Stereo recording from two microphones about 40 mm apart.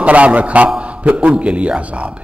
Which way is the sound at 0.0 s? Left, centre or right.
Right.